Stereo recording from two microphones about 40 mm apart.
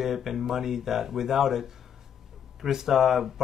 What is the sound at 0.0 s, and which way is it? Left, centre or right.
Speech, centre.